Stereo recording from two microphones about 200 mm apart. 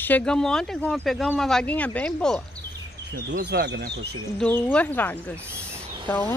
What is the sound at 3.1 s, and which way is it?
Speech, 55° right (ahead or behind).